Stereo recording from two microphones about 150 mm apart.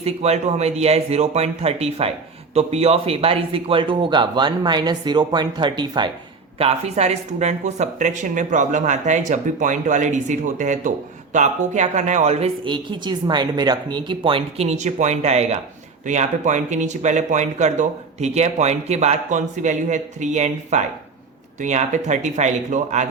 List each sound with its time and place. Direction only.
0.0 s speech: 45° right (ahead or behind); by 6.1 s 30° right (ahead or behind)
6.6 s speech: 45° right (ahead or behind)
12.6 s speech: 30° right (ahead or behind)
14.7 s speech: 50° right (ahead or behind)